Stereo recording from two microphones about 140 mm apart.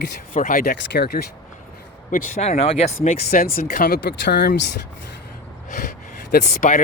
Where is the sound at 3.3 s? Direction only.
90° left.